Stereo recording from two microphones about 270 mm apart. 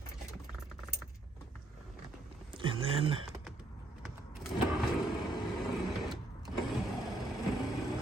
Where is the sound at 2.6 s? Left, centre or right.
Centre.